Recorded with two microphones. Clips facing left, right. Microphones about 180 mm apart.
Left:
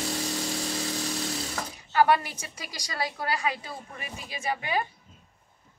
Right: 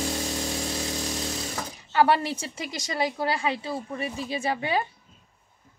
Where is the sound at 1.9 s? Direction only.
30° right (ahead or behind).